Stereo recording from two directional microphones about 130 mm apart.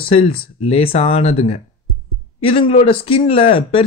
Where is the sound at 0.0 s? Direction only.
45° left (ahead or behind).